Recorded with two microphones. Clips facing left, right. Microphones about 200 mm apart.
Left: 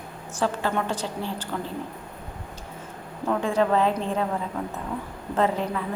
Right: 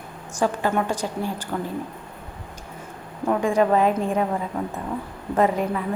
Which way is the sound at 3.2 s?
15° right (ahead or behind).